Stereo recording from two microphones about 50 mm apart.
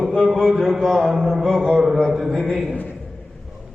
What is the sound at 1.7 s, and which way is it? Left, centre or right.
Speech, centre.